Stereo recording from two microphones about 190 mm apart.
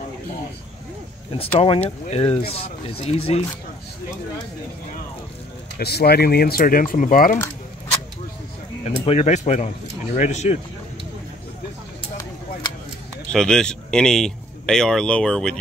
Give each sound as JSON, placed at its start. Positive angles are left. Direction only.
{"t": 1.6, "sound": "speech", "side_deg": 30}
{"t": 5.8, "sound": "speech", "side_deg": 55}
{"t": 8.8, "sound": "speech", "side_deg": 35}
{"t": 13.3, "sound": "speech", "side_deg": 5}